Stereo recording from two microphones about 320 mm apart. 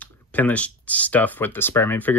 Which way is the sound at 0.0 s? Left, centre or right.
Centre.